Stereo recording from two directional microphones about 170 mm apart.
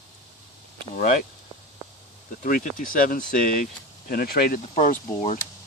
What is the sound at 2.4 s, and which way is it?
Speech, 55° left (ahead or behind).